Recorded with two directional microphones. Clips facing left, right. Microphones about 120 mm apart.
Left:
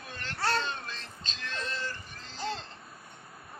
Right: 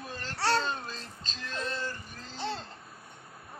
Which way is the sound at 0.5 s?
40° right (ahead or behind).